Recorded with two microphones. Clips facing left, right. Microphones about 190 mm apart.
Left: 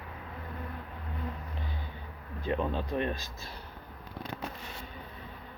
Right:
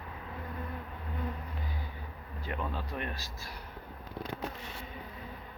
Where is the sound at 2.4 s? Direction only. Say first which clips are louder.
Left 6 dB; 20° left (ahead or behind).